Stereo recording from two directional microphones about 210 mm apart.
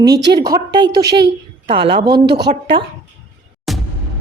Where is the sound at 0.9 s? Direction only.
50° right (ahead or behind).